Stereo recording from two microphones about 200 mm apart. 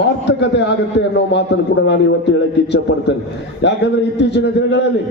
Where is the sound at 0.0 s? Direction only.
60° left (ahead or behind).